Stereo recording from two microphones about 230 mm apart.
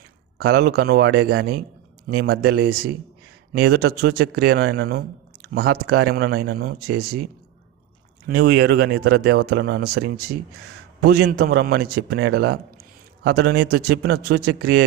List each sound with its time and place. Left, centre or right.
0.3 s a man's voice: right
8.3 s a man's voice: right